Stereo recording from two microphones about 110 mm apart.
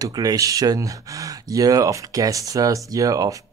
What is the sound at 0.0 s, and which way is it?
Speech, 35° right (ahead or behind).